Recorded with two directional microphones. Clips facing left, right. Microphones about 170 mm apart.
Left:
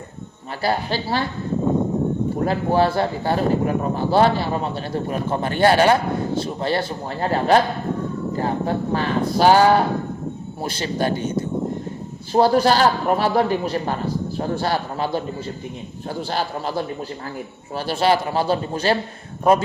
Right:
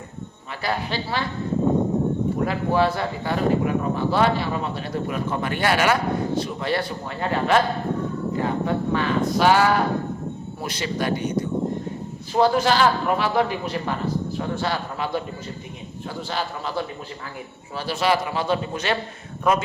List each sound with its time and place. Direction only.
0.6 s speech: 35° left (ahead or behind)
2.4 s speech: 35° left (ahead or behind)
17.9 s speech: 30° left (ahead or behind)